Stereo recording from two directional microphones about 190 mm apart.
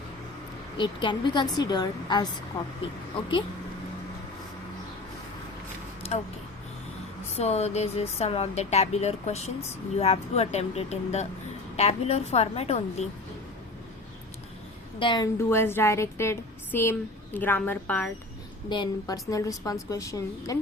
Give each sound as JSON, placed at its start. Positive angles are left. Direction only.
{"t": 0.8, "sound": "a woman's voice", "side_deg": 25}
{"t": 7.3, "sound": "speech", "side_deg": 35}
{"t": 14.9, "sound": "a woman's voice", "side_deg": 25}
{"t": 15.4, "sound": "a woman's voice", "side_deg": 10}
{"t": 18.7, "sound": "a woman's voice", "side_deg": 20}